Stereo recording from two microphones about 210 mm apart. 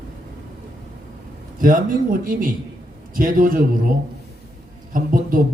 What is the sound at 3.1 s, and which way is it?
Speech, 40° right (ahead or behind).